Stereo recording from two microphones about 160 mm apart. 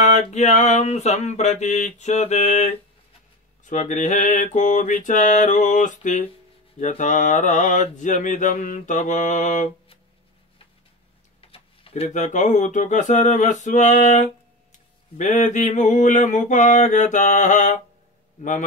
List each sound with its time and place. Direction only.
0.0 s speech: 45° left (ahead or behind)
11.4 s speech: 35° left (ahead or behind); by 18.7 s 50° left (ahead or behind)